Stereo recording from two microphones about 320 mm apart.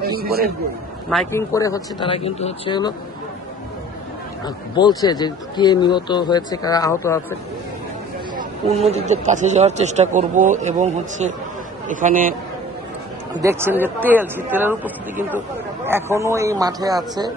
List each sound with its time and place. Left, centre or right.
0.0 s a sound: right
1.3 s speech: centre
4.7 s speech: centre
8.8 s a man's voice: centre
13.4 s a man's voice: centre